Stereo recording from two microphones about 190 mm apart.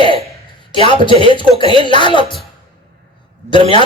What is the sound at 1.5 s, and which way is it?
Speech, 30° right (ahead or behind).